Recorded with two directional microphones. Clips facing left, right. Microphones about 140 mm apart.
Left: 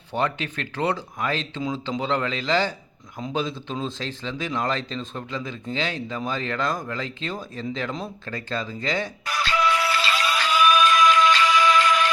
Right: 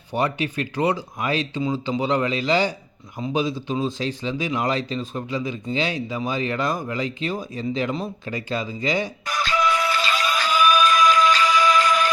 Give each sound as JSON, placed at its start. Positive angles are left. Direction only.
{"t": 0.1, "sound": "speech", "side_deg": -10}
{"t": 9.5, "sound": "music", "side_deg": 35}
{"t": 10.2, "sound": "music", "side_deg": -40}